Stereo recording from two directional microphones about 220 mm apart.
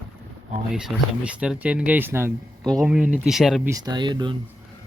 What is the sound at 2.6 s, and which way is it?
Speech, centre (ahead or behind).